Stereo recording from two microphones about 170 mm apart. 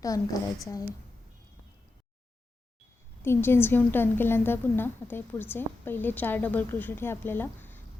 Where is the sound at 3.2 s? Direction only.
15° left (ahead or behind).